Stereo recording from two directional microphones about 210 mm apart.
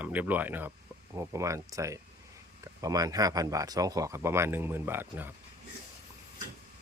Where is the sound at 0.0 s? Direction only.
10° right (ahead or behind).